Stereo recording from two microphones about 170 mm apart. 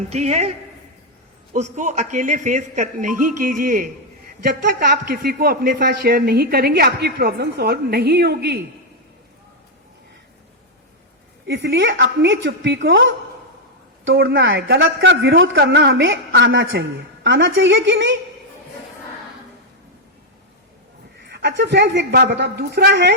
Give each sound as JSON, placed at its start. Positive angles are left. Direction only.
{"t": 0.1, "sound": "a woman's voice", "side_deg": -40}
{"t": 1.5, "sound": "speech", "side_deg": -45}
{"t": 4.4, "sound": "speech", "side_deg": -70}
{"t": 11.4, "sound": "a woman's voice", "side_deg": -75}
{"t": 14.0, "sound": "a woman's voice", "side_deg": -85}
{"t": 21.2, "sound": "speech", "side_deg": -75}